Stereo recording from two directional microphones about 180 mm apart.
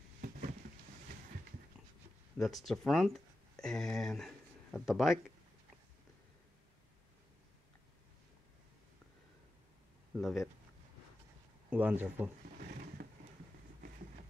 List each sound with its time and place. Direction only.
2.3 s speech: centre (ahead or behind)
10.1 s speech: centre (ahead or behind)
11.7 s speech: 10° right (ahead or behind)
12.5 s a sound: 55° right (ahead or behind)